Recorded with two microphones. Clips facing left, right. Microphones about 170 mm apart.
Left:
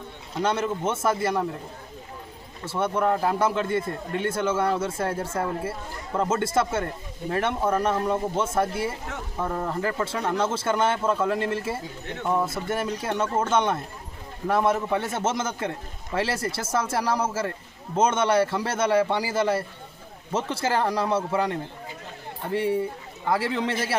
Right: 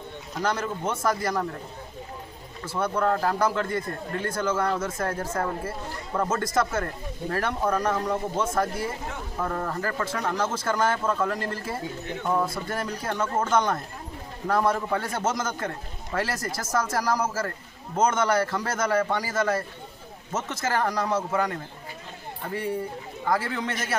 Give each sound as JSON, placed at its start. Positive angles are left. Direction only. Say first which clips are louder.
{"t": 0.3, "sound": "speech", "louder": "left 3 dB", "side_deg": 25}
{"t": 2.6, "sound": "speech", "louder": "left 1 dB", "side_deg": 25}
{"t": 7.6, "sound": "speech", "louder": "even", "side_deg": 5}
{"t": 8.4, "sound": "speech", "louder": "left 1 dB", "side_deg": 25}
{"t": 9.4, "sound": "speech", "louder": "left 2 dB", "side_deg": 10}